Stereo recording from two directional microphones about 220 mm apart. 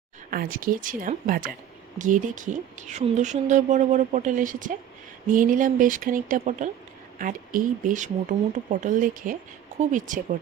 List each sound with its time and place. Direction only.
0.3 s speech: 40° right (ahead or behind)